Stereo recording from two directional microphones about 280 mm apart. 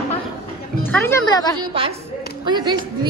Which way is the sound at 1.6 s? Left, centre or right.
Centre.